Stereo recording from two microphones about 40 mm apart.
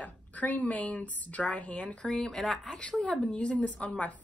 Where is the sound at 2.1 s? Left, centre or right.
Centre.